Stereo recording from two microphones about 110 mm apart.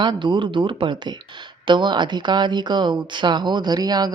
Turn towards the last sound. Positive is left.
turn(degrees=-40)  # may be behind; listen again after turning